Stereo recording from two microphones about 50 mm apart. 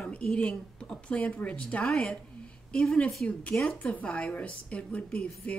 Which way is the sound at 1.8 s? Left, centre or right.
Centre.